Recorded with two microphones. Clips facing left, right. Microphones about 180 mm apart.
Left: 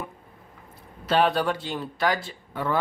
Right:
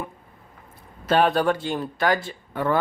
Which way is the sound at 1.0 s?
50° right (ahead or behind).